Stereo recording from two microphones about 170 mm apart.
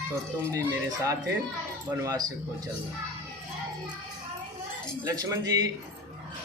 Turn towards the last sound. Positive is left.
turn(degrees=-20)  # may be behind; listen again after turning